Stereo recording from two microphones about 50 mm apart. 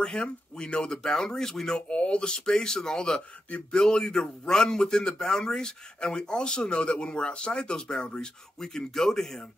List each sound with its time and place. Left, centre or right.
0.0 s a man's voice: centre
1.8 s a man's voice: left
3.4 s a sound: left
3.8 s a man's voice: centre